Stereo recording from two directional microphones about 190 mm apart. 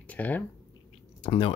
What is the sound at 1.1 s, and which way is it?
Speech, 30° left (ahead or behind).